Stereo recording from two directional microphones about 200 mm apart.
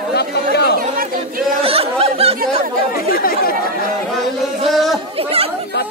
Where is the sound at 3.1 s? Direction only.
45° left (ahead or behind).